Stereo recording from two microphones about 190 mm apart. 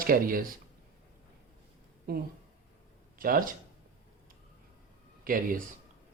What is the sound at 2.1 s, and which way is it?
Speech, 50° right (ahead or behind).